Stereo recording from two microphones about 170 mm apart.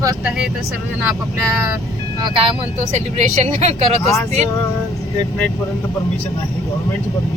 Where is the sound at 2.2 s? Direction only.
30° right (ahead or behind).